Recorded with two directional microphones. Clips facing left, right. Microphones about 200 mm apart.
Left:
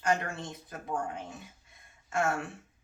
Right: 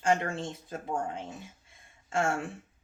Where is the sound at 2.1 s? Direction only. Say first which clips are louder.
Right 1 dB; 30° right (ahead or behind).